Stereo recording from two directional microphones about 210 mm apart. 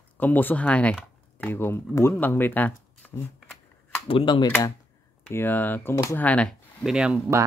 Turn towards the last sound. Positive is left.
turn(degrees=-5)  # may be behind; listen again after turning